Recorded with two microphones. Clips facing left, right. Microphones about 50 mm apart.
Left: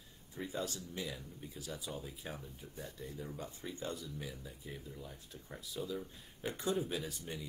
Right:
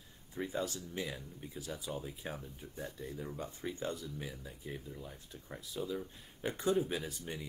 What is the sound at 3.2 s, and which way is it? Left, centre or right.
Speech, centre.